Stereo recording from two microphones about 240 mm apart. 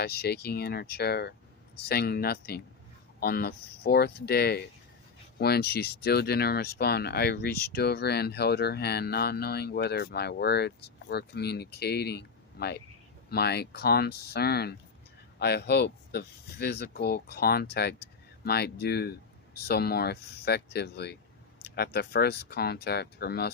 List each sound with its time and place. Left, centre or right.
0.0 s speech: left